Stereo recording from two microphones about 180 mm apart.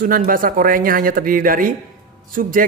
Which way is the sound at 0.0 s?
50° right (ahead or behind).